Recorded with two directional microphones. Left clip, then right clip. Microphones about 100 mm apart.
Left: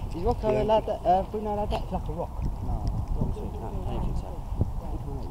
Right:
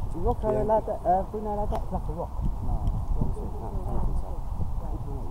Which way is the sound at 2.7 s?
15° left (ahead or behind).